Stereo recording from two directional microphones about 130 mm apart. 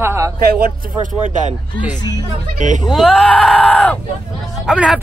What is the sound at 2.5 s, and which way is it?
Speech, 75° right (ahead or behind).